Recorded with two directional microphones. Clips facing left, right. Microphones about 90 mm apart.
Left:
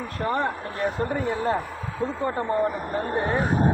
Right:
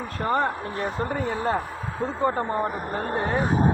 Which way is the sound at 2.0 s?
35° right (ahead or behind).